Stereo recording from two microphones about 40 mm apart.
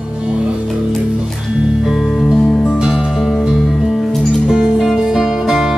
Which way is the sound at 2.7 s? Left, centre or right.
Right.